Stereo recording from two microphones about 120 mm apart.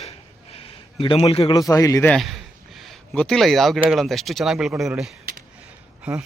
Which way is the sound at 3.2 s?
5° left (ahead or behind).